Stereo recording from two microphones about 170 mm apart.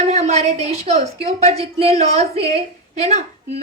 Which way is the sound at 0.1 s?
40° right (ahead or behind).